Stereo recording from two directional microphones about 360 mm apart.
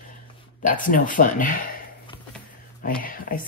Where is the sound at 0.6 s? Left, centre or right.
Left.